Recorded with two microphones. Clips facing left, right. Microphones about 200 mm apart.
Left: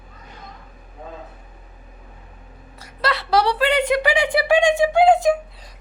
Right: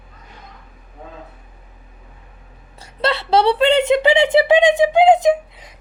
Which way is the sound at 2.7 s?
25° right (ahead or behind).